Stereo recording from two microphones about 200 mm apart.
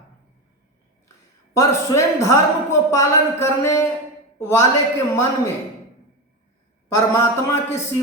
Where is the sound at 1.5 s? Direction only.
15° left (ahead or behind).